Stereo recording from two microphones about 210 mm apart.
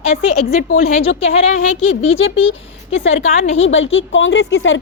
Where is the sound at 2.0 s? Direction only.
65° left (ahead or behind).